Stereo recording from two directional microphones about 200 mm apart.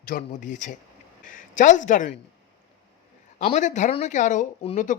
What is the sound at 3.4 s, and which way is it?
Speech, 35° left (ahead or behind).